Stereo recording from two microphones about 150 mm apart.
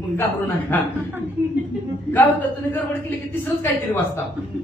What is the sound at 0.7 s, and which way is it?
Speech, 10° left (ahead or behind).